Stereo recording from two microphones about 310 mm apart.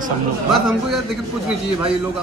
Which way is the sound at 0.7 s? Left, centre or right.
Centre.